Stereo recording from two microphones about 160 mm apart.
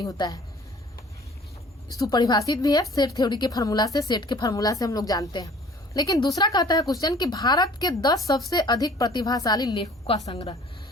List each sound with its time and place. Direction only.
0.0 s a woman's voice: 25° left (ahead or behind)
1.9 s a woman's voice: 25° left (ahead or behind)
10.1 s a woman's voice: 35° left (ahead or behind)